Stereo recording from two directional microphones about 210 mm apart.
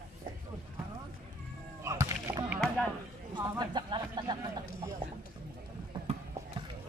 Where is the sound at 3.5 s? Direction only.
20° right (ahead or behind).